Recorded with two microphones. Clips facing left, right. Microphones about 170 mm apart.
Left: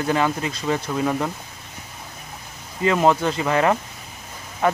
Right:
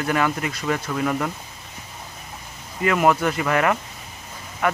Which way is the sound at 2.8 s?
25° left (ahead or behind).